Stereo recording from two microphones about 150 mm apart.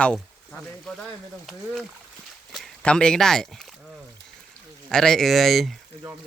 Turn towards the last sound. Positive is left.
turn(degrees=0)  # may be behind; listen again after turning